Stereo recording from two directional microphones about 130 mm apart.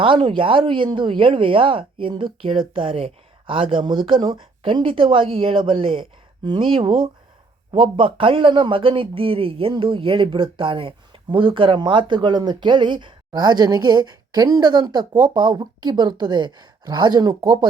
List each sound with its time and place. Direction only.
0.0 s a man's voice: 45° right (ahead or behind)